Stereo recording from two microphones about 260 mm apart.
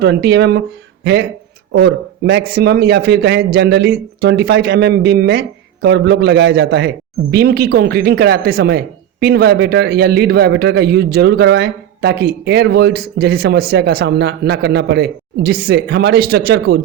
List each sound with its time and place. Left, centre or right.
0.0 s a man's voice: right